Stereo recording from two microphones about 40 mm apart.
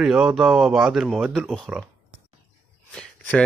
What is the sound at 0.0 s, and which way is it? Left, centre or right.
Speech, centre.